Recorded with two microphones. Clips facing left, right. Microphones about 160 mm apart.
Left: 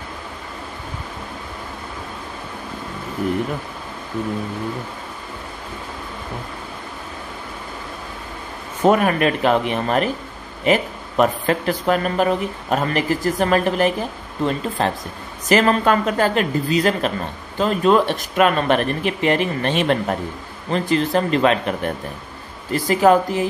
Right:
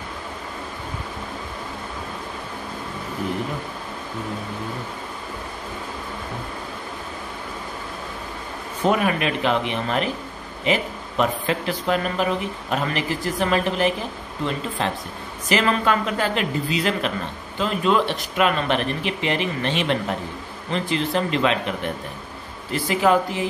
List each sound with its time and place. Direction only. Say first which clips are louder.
8.8 s speech: left 5 dB; 45° left (ahead or behind)